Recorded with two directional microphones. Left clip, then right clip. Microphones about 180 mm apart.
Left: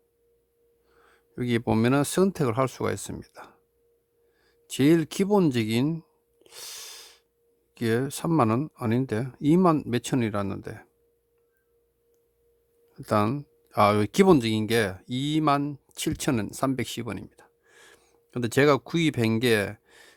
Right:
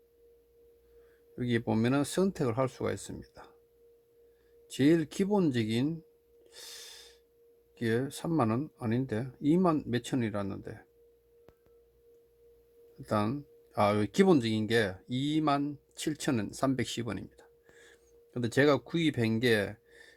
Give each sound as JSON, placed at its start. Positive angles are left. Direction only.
{"t": 1.0, "sound": "speech", "side_deg": 45}
{"t": 4.7, "sound": "speech", "side_deg": 45}
{"t": 6.4, "sound": "snort", "side_deg": 45}
{"t": 7.8, "sound": "speech", "side_deg": 45}
{"t": 13.0, "sound": "speech", "side_deg": 45}